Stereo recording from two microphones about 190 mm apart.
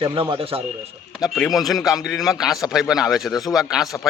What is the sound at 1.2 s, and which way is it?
A man's voice, centre (ahead or behind).